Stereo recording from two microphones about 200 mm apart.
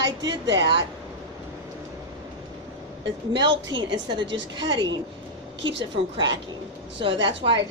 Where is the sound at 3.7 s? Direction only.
65° right (ahead or behind).